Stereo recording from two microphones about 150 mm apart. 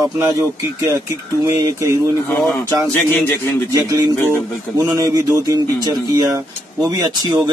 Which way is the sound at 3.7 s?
25° right (ahead or behind).